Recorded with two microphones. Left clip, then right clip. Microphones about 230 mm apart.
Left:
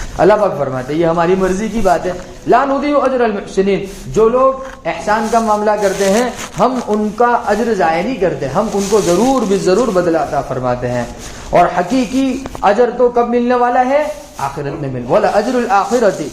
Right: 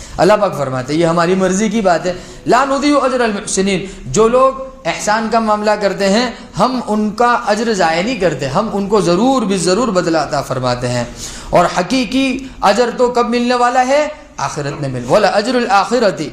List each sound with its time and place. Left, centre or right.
0.2 s speech: right
15.1 s speech: right